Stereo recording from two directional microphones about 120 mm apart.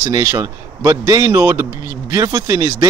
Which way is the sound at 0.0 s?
30° right (ahead or behind).